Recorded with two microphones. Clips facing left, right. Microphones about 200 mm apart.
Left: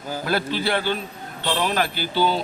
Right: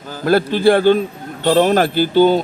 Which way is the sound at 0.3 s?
50° right (ahead or behind).